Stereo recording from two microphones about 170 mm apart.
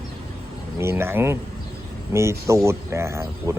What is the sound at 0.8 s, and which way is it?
Speech, 15° right (ahead or behind).